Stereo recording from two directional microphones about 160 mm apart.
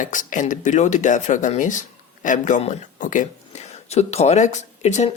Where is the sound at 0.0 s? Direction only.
55° left (ahead or behind).